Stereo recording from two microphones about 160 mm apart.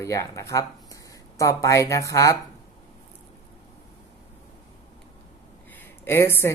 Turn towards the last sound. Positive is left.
turn(degrees=15)  # may be behind; listen again after turning